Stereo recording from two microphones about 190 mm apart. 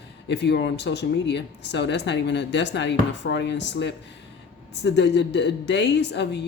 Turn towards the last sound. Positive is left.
turn(degrees=65)  # may be behind; listen again after turning